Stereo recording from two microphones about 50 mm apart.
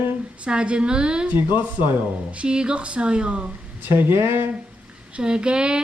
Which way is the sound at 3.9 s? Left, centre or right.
Right.